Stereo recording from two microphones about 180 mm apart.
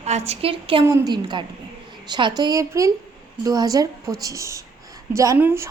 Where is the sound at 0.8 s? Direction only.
20° right (ahead or behind).